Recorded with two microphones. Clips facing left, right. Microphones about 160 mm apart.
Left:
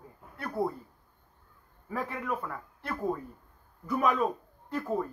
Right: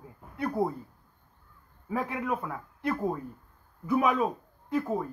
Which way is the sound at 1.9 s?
5° right (ahead or behind).